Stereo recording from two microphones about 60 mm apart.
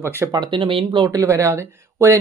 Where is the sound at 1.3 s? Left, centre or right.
Right.